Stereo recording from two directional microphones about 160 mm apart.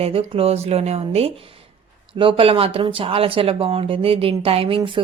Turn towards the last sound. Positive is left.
turn(degrees=-30)  # may be behind; listen again after turning